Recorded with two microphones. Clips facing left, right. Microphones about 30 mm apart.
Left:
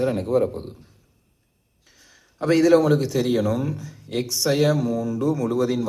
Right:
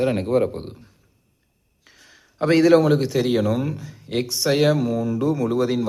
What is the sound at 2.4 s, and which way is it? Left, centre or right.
Speech, right.